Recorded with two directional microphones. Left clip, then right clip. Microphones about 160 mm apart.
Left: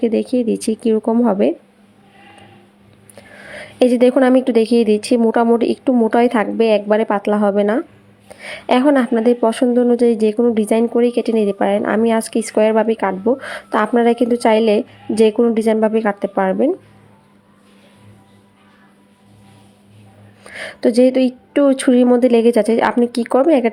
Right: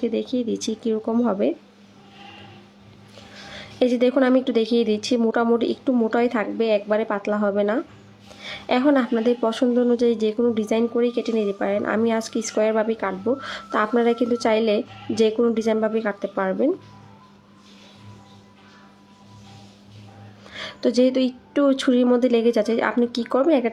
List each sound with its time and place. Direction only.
0.0 s a woman's voice: 30° left (ahead or behind)
3.5 s a woman's voice: 30° left (ahead or behind)
20.4 s a woman's voice: 30° left (ahead or behind)